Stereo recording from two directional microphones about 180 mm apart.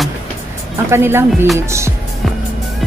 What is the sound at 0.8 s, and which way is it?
Speech, 15° right (ahead or behind).